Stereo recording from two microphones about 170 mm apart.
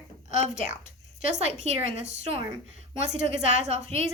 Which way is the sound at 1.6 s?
40° right (ahead or behind).